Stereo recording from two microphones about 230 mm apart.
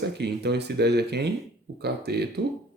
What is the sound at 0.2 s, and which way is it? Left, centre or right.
Speech, right.